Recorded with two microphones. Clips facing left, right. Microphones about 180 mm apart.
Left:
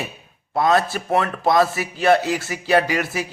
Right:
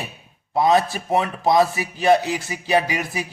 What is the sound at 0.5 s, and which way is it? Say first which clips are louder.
A man's voice: right 1 dB; 15° right (ahead or behind).